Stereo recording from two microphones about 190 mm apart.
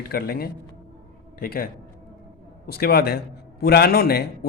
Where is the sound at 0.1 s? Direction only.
55° left (ahead or behind).